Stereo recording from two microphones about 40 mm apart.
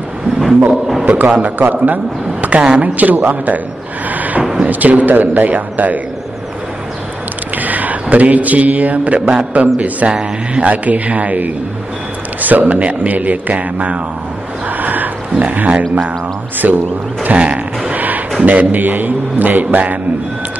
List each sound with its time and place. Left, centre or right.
1.0 s speech: right
1.6 s speech: right
2.4 s speech: right
7.5 s mantra: right
9.5 s speech: right
14.8 s a sound: right
15.4 s speech: right
17.2 s speech: right
17.9 s a sound: right
18.4 s speech: right
18.8 s speech: right